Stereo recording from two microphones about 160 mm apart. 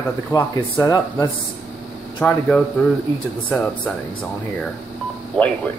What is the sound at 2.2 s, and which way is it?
Speech, 5° left (ahead or behind).